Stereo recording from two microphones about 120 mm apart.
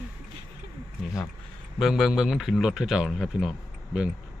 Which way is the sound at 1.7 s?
5° right (ahead or behind).